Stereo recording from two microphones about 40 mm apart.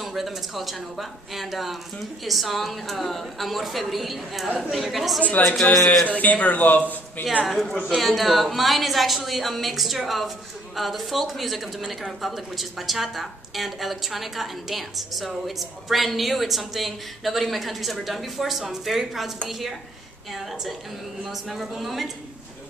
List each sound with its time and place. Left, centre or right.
0.0 s speech: centre
6.1 s speech: left
7.9 s speech: centre
21.2 s speech: centre